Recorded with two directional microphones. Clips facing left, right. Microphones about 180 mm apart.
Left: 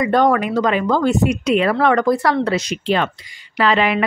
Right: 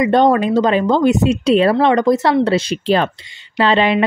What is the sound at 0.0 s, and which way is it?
A woman's voice, 25° right (ahead or behind).